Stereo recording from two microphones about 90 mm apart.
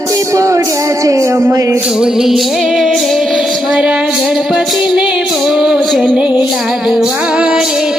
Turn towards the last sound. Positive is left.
turn(degrees=-5)  # may be behind; listen again after turning